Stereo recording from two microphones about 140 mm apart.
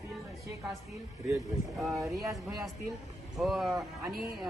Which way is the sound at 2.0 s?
25° right (ahead or behind).